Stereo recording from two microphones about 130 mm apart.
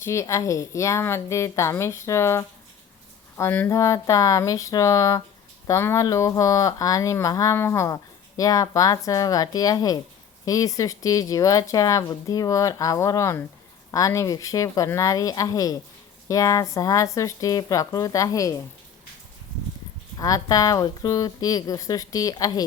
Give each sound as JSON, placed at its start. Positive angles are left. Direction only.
{"t": 0.0, "sound": "speech", "side_deg": 25}
{"t": 20.1, "sound": "speech", "side_deg": 25}